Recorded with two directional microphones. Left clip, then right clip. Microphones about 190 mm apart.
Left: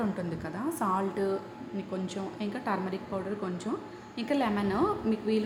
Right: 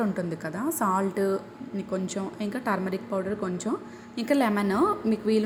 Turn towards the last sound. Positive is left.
turn(degrees=-25)  # may be behind; listen again after turning